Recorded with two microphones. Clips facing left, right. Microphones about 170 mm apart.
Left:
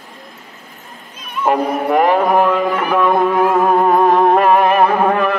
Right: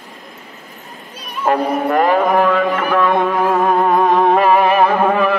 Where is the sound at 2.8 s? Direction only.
10° left (ahead or behind).